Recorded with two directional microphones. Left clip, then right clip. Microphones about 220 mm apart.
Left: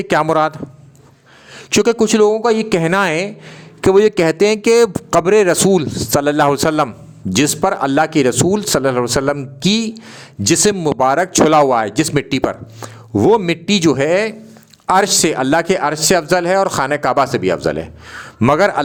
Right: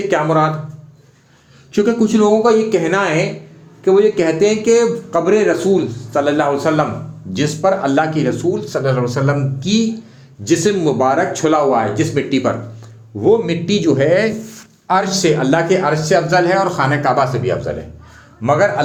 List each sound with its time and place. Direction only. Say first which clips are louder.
0.1 s speech: left 2 dB; 45° left (ahead or behind)
1.7 s speech: left 2 dB; 50° left (ahead or behind)